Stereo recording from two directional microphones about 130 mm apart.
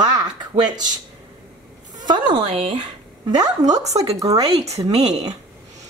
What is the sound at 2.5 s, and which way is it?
Speech, 45° right (ahead or behind).